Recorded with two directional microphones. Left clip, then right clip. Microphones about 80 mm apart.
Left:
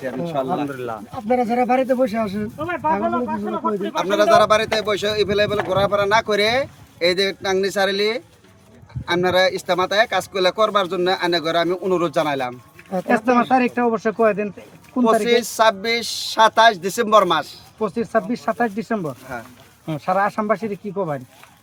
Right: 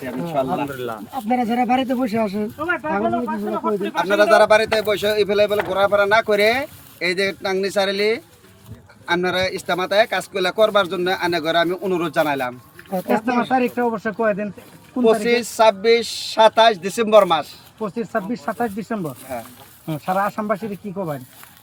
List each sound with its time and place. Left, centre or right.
0.0 s a man's voice: left